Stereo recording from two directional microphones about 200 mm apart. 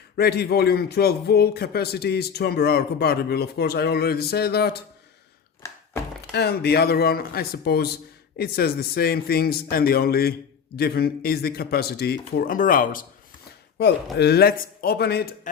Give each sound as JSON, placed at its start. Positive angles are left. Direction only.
{"t": 0.2, "sound": "a man's voice", "side_deg": 55}
{"t": 5.6, "sound": "thunk", "side_deg": 15}
{"t": 6.3, "sound": "a man's voice", "side_deg": 55}
{"t": 13.7, "sound": "a man's voice", "side_deg": 55}